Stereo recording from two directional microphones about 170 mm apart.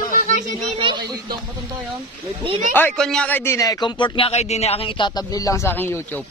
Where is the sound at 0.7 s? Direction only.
30° right (ahead or behind).